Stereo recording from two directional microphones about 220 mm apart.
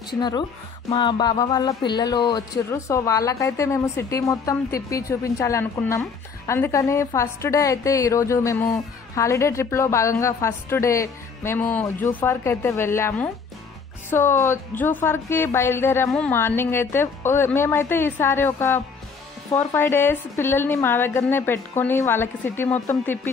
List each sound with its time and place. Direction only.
0.2 s a woman's voice: 20° left (ahead or behind)